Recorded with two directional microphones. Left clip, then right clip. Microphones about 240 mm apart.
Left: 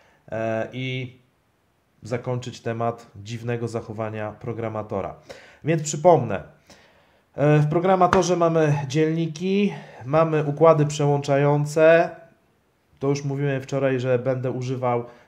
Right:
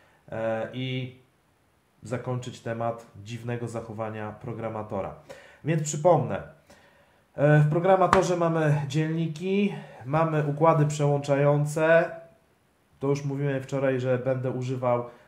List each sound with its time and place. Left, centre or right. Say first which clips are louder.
0.3 s speech: left 3 dB; left
2.0 s speech: left 5 dB; left